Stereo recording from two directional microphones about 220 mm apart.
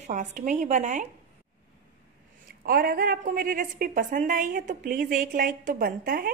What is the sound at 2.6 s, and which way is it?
A woman's voice, 45° right (ahead or behind).